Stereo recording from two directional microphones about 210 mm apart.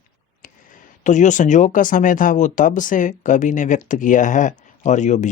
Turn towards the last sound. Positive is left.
turn(degrees=35)  # may be behind; listen again after turning